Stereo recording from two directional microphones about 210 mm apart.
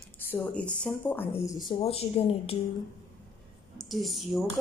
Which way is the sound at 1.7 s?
25° left (ahead or behind).